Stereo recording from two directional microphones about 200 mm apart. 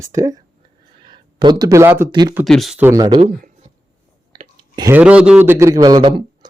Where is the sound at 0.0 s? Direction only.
15° right (ahead or behind).